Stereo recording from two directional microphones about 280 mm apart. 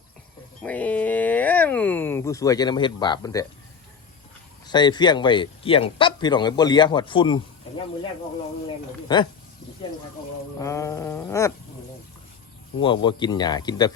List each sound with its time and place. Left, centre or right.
0.6 s speech: centre
4.7 s speech: centre
9.1 s speech: centre
10.6 s speech: centre
12.8 s speech: centre